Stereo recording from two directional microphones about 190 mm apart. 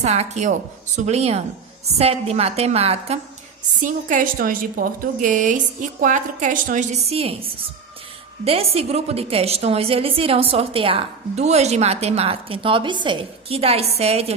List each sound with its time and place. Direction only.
0.0 s a woman's voice: 35° right (ahead or behind)
3.8 s a woman's voice: 45° right (ahead or behind)
7.1 s a woman's voice: 30° right (ahead or behind)
8.4 s a woman's voice: 30° right (ahead or behind)